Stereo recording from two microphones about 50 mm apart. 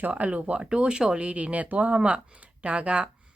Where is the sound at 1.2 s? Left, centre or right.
Right.